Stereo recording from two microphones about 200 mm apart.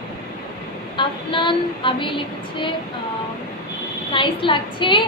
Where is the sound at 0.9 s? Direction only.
25° left (ahead or behind).